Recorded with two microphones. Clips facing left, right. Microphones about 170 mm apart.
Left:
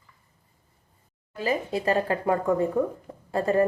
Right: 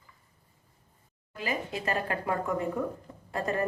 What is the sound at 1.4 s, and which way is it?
A woman's voice, 30° left (ahead or behind).